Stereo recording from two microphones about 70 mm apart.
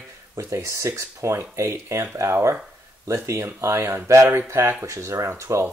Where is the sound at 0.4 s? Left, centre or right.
Right.